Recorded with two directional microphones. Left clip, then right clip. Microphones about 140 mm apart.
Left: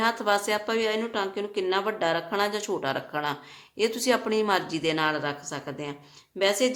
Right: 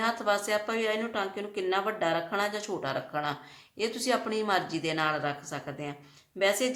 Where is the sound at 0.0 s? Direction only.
35° left (ahead or behind).